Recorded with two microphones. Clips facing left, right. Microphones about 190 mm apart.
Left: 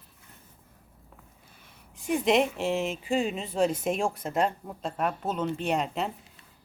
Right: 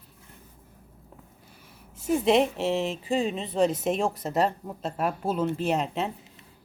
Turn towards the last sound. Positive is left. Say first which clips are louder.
# right 2 dB
turn(degrees=0)  # may be behind; listen again after turning